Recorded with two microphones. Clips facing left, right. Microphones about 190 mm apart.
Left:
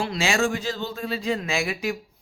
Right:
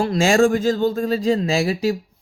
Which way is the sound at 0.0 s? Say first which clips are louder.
Right 8 dB; 45° right (ahead or behind).